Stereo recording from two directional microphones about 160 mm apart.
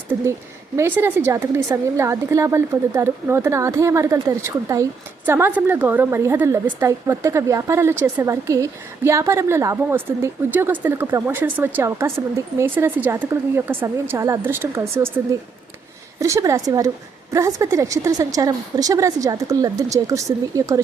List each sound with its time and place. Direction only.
0.1 s a woman's voice: 15° right (ahead or behind)